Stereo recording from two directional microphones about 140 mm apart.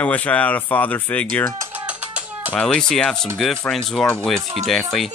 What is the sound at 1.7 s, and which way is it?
Music, 10° right (ahead or behind).